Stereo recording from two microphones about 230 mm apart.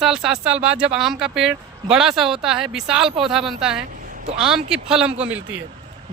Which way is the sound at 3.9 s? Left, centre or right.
Right.